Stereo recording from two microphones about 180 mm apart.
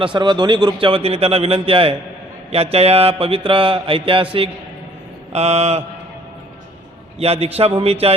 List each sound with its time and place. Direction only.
0.0 s a man's voice: 25° right (ahead or behind)
2.7 s mantra: 35° right (ahead or behind)
7.2 s mantra: 35° right (ahead or behind)